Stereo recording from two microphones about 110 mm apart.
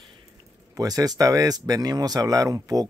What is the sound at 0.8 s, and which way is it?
Speech, 35° right (ahead or behind).